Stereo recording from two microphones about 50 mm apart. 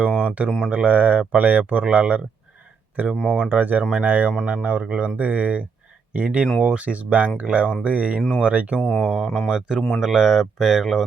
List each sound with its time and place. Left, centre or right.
0.1 s a sound: right
0.7 s speech: right
8.8 s speech: centre
9.5 s speech: centre